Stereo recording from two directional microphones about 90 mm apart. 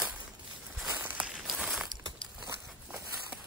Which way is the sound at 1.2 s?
5° right (ahead or behind).